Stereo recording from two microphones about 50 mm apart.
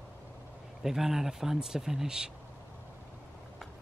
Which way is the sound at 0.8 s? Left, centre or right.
Centre.